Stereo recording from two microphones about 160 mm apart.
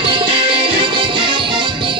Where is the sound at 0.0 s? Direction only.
30° right (ahead or behind).